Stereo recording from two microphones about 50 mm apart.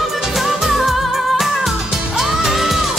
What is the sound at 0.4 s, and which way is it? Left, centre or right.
Music, centre.